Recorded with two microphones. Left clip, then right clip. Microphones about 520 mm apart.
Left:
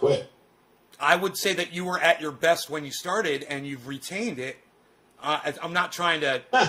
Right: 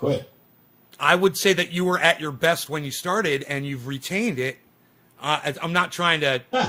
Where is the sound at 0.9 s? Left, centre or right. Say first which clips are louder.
Right 4 dB; right.